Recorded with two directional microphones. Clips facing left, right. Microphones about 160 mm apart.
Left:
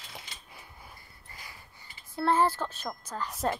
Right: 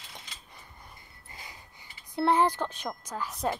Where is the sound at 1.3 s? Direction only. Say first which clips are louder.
Right 2 dB; 20° right (ahead or behind).